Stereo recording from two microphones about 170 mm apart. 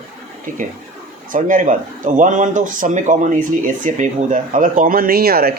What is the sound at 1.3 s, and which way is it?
Speech, 50° right (ahead or behind).